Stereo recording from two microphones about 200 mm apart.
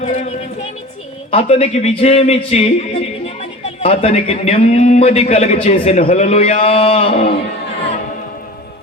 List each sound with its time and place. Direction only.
0.0 s a woman's voice: 35° left (ahead or behind)
1.3 s a man's voice: 30° left (ahead or behind)